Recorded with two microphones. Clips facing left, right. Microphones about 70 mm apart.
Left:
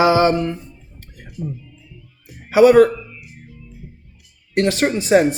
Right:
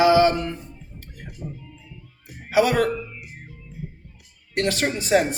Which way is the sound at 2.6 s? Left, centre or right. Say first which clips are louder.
Left 10 dB; left.